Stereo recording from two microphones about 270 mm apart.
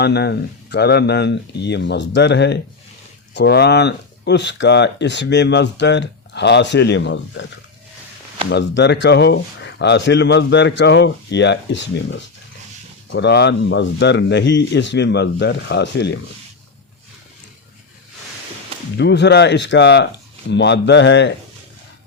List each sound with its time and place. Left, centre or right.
0.0 s speech: left
8.4 s speech: left
18.9 s speech: left